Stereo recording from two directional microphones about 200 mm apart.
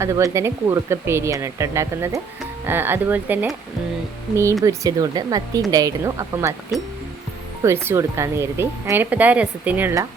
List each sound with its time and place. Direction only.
0.0 s speech: 15° right (ahead or behind)
4.6 s speech: 15° right (ahead or behind)
7.6 s speech: 15° right (ahead or behind)